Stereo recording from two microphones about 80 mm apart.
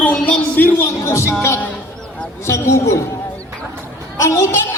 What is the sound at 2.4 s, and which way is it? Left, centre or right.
Speech, left.